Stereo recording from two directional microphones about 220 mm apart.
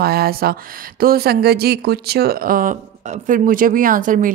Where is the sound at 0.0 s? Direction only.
45° right (ahead or behind).